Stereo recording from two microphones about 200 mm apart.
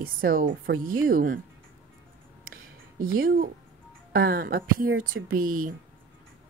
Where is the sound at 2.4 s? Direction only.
45° right (ahead or behind).